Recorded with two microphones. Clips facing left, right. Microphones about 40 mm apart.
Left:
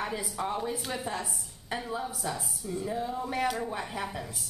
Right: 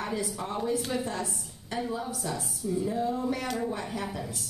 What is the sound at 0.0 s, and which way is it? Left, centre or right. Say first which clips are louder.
A woman's voice: even; centre.